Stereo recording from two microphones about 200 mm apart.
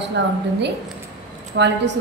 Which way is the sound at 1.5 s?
60° right (ahead or behind).